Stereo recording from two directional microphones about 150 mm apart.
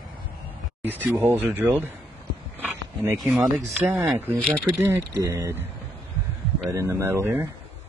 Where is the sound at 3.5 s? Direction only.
Centre (ahead or behind).